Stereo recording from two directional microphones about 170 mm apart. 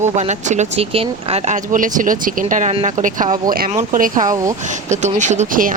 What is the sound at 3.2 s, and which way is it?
Speech, 20° right (ahead or behind).